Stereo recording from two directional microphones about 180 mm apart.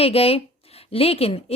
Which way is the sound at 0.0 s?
35° left (ahead or behind).